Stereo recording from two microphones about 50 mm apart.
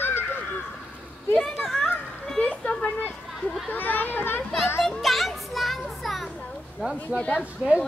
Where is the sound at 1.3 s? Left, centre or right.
Centre.